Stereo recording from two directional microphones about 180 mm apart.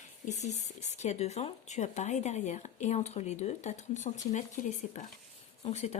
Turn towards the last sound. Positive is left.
turn(degrees=40)  # may be behind; listen again after turning